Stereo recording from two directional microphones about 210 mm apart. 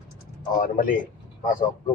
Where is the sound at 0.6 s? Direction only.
40° left (ahead or behind).